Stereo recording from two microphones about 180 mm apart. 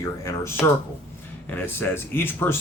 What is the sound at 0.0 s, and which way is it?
A man's voice, 15° left (ahead or behind).